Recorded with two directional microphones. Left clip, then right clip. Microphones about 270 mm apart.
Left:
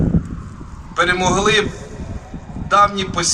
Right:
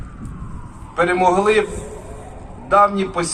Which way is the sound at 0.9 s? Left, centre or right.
Left.